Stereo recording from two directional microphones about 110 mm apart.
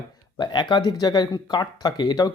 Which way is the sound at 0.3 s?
40° left (ahead or behind).